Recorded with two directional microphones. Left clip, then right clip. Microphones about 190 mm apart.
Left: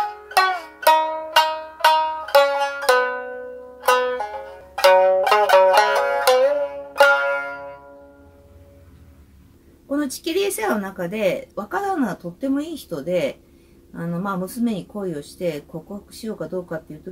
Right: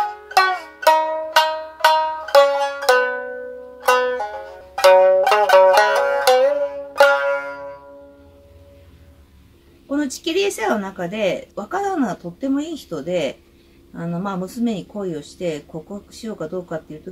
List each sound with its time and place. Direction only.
0.3 s banjo: 15° right (ahead or behind)
2.5 s music: 15° right (ahead or behind)
9.8 s speech: centre (ahead or behind)